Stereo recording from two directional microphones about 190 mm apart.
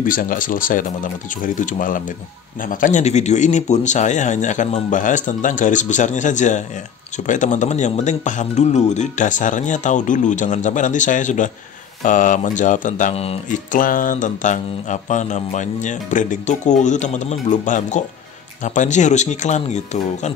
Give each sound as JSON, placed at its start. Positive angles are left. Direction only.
{"t": 0.0, "sound": "speech", "side_deg": 45}
{"t": 2.6, "sound": "mantra", "side_deg": 45}
{"t": 12.0, "sound": "speech", "side_deg": 40}
{"t": 13.7, "sound": "mantra", "side_deg": 45}